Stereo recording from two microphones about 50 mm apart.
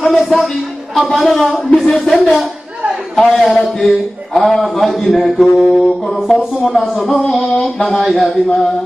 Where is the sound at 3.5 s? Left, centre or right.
Centre.